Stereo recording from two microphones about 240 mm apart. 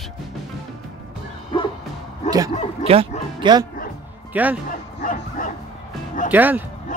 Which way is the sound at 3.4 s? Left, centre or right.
Centre.